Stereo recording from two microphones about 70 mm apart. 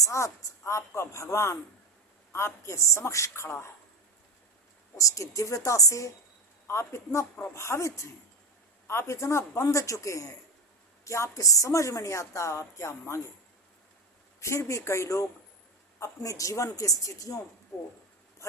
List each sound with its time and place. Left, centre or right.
0.0 s a woman's voice: left
4.9 s a woman's voice: left
6.7 s a woman's voice: left
14.4 s a woman's voice: left